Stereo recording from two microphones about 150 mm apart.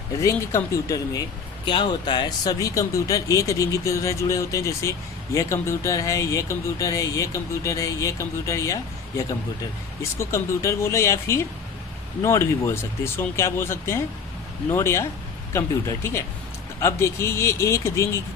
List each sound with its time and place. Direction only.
0.2 s speech: 20° left (ahead or behind)